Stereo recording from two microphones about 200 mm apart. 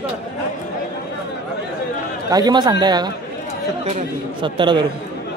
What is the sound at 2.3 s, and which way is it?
Speech, 20° right (ahead or behind).